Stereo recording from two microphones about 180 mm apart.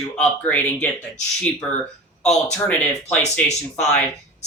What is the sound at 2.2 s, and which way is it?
Speech, 10° left (ahead or behind).